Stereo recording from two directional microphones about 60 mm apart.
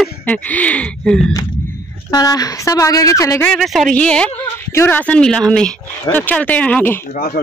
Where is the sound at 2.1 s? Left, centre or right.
Left.